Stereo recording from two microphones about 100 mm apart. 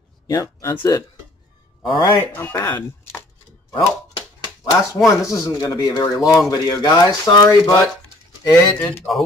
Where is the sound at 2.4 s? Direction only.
20° left (ahead or behind).